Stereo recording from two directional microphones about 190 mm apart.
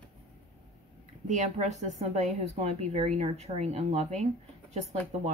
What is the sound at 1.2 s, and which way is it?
A woman's voice, 40° right (ahead or behind).